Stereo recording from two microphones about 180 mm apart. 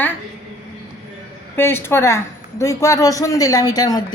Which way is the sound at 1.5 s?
15° left (ahead or behind).